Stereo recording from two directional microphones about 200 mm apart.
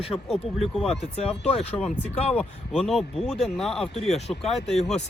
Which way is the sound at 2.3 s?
Centre (ahead or behind).